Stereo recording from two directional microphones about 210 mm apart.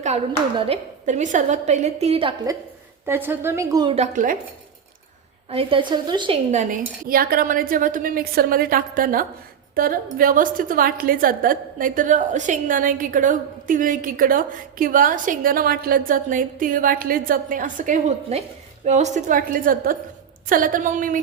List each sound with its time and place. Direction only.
0.7 s a woman's voice: 35° right (ahead or behind)
3.1 s a woman's voice: 10° right (ahead or behind)
3.9 s a woman's voice: 35° right (ahead or behind)
5.5 s a woman's voice: 25° right (ahead or behind)